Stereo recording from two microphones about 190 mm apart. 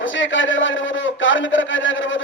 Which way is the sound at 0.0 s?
80° left.